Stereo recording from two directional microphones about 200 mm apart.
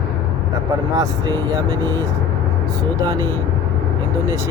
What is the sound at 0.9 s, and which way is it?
Speech, 20° right (ahead or behind).